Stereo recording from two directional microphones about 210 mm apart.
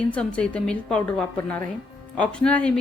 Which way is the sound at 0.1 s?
5° left (ahead or behind).